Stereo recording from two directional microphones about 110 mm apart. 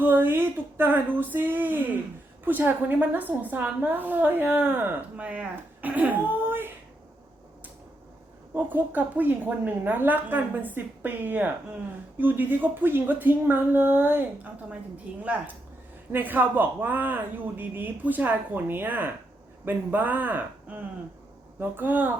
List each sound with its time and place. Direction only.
0.0 s a woman's voice: 20° right (ahead or behind)
8.5 s a woman's voice: 15° right (ahead or behind)